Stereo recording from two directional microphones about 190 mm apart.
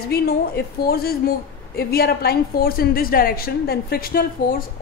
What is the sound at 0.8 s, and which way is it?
A woman's voice, 55° left (ahead or behind).